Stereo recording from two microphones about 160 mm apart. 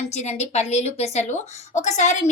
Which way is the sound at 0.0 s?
45° left (ahead or behind).